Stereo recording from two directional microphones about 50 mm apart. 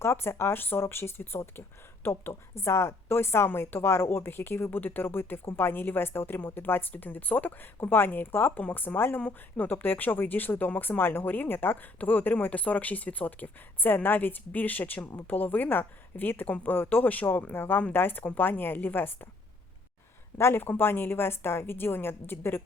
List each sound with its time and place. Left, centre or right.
0.0 s a woman's voice: left
20.4 s a woman's voice: left